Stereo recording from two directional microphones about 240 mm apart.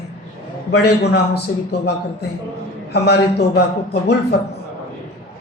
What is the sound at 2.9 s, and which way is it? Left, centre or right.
Speech, left.